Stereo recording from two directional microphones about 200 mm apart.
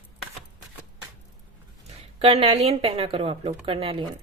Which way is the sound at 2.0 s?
30° right (ahead or behind).